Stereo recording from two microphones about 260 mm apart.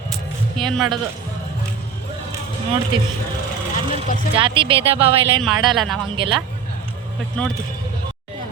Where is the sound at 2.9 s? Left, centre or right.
Centre.